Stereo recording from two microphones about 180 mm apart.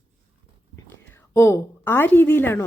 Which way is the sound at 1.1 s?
15° left (ahead or behind).